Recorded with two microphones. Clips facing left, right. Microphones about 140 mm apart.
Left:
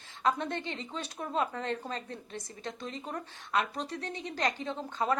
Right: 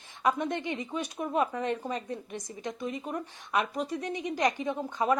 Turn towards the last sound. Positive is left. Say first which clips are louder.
# right 4 dB
turn(degrees=-15)  # may be behind; listen again after turning